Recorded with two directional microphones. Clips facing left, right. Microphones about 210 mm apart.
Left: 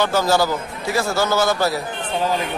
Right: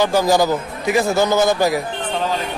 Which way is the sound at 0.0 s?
15° right (ahead or behind).